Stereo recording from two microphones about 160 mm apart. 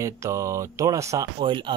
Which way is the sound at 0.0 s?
20° right (ahead or behind).